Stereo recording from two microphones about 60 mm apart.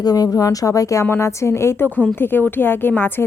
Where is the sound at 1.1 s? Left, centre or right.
Left.